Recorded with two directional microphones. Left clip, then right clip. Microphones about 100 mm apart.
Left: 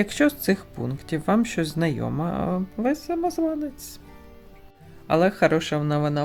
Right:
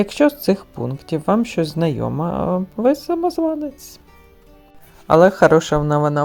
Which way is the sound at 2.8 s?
60° right (ahead or behind).